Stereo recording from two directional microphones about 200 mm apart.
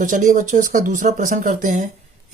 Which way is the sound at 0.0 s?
40° right (ahead or behind).